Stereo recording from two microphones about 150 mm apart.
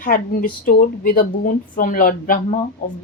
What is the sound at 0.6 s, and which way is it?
A woman's voice, 70° left (ahead or behind).